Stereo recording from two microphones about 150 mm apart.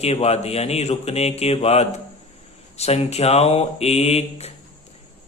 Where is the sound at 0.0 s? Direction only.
45° left (ahead or behind).